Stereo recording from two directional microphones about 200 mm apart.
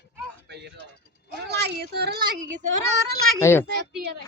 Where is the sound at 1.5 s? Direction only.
55° right (ahead or behind).